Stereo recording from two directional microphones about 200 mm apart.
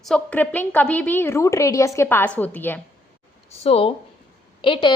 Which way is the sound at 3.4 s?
30° left (ahead or behind).